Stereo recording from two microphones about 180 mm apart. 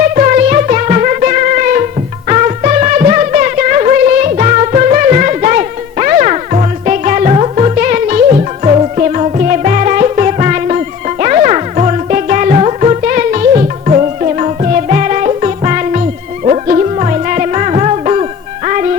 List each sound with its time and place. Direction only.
0.0 s music: 45° right (ahead or behind)